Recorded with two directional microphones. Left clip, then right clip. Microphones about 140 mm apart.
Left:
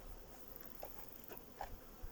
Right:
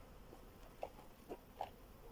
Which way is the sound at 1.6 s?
20° right (ahead or behind).